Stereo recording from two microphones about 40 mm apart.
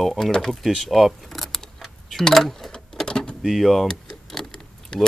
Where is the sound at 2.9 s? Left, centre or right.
Centre.